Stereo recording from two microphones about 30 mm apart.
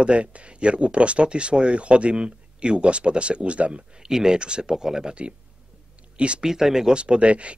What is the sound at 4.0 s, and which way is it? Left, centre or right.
Speech, right.